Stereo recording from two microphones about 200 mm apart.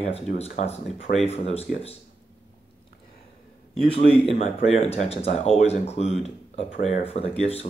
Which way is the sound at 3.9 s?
30° left (ahead or behind).